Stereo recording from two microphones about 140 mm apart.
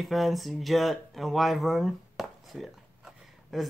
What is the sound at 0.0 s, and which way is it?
Speech, centre (ahead or behind).